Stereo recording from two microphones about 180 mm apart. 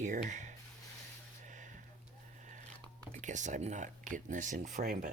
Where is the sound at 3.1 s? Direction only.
45° right (ahead or behind).